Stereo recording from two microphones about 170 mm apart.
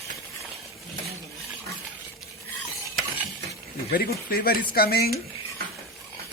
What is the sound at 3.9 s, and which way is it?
Speech, 60° left (ahead or behind).